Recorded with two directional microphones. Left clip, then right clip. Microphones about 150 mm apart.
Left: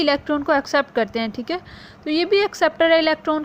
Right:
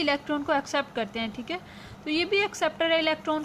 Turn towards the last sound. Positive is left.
turn(degrees=35)  # may be behind; listen again after turning